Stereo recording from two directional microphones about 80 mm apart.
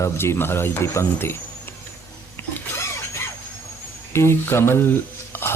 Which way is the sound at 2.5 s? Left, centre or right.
Left.